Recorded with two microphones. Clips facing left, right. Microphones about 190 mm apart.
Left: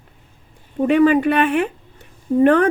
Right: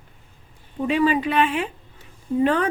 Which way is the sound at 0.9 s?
55° left (ahead or behind).